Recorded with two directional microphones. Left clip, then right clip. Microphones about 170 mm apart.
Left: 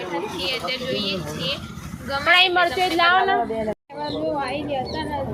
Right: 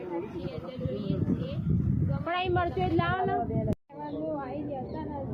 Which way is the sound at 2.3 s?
35° right (ahead or behind).